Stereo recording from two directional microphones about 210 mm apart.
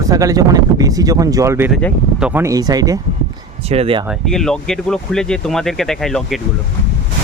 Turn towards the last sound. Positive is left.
turn(degrees=0)  # may be behind; listen again after turning